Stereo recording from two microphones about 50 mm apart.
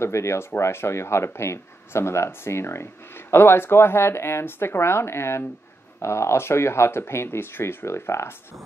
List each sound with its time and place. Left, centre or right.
0.0 s speech: left
0.6 s speech: left